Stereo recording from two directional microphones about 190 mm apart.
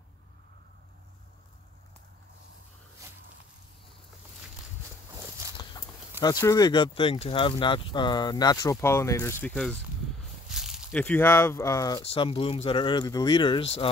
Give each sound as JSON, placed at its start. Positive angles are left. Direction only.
{"t": 5.1, "sound": "walk", "side_deg": -15}
{"t": 5.6, "sound": "livestock", "side_deg": 25}
{"t": 6.4, "sound": "speech", "side_deg": 20}
{"t": 10.5, "sound": "snake", "side_deg": -5}
{"t": 11.0, "sound": "speech", "side_deg": 10}